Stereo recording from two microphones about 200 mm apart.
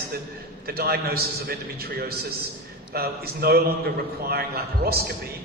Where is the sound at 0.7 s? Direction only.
50° right (ahead or behind).